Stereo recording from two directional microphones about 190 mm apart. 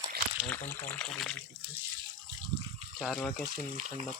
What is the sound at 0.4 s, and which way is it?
Speech, 10° left (ahead or behind).